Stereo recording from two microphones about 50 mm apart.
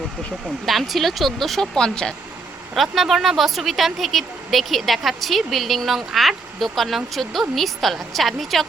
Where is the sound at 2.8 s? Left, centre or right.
Centre.